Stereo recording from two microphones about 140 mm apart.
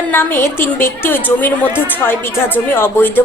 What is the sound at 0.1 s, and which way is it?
A woman's voice, 15° left (ahead or behind).